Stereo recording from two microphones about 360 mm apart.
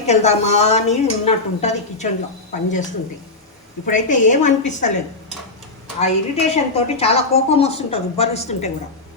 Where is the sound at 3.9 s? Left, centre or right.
Left.